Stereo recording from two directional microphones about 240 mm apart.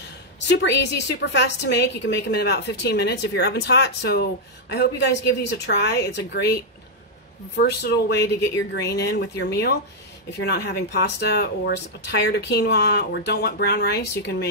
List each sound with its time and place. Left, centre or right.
0.5 s a woman's voice: left